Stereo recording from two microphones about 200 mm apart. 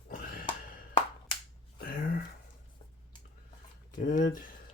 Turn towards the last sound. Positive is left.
turn(degrees=40)  # may be behind; listen again after turning